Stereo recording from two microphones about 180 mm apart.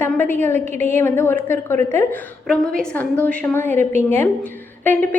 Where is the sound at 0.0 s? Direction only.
10° left (ahead or behind).